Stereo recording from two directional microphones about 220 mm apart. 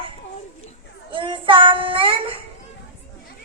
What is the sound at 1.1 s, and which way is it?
Child singing, 25° right (ahead or behind).